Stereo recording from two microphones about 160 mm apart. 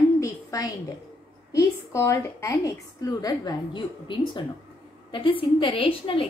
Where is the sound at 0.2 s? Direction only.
20° left (ahead or behind).